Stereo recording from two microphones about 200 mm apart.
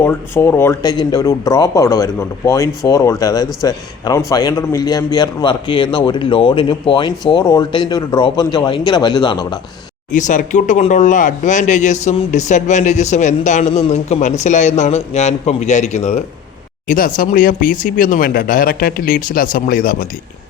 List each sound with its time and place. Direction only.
0.0 s a man's voice: 10° left (ahead or behind)
10.1 s speech: 40° left (ahead or behind)
16.8 s speech: 40° left (ahead or behind)